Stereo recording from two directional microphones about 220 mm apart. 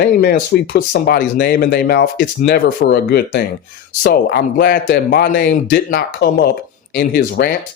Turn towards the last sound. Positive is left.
turn(degrees=45)  # may be behind; listen again after turning